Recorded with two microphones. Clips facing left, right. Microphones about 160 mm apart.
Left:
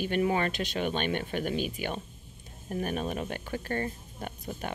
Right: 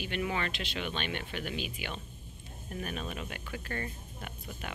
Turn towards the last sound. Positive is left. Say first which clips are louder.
# left 6 dB
turn(degrees=40)  # may be behind; listen again after turning